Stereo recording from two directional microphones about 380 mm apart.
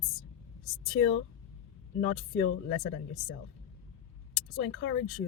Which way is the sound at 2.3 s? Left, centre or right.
Left.